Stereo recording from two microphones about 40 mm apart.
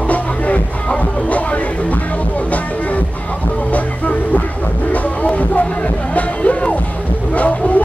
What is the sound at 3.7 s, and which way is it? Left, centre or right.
Vehicle, left.